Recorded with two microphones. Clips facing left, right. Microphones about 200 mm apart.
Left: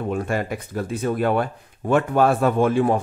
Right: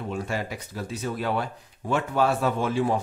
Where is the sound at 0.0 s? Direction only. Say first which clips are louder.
Left 6 dB; 55° left (ahead or behind).